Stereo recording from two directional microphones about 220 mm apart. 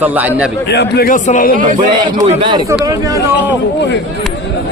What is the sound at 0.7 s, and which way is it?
Speech, 45° left (ahead or behind).